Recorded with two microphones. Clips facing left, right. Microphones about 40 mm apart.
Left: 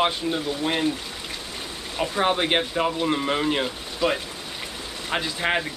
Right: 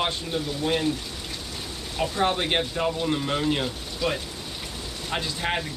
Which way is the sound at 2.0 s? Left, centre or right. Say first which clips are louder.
Left 2 dB; centre.